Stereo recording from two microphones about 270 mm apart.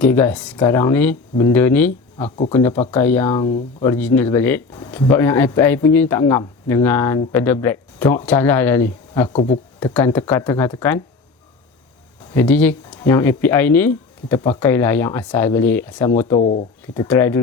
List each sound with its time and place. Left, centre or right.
0.0 s speech: centre
12.3 s speech: centre
16.4 s speech: left
16.8 s speech: centre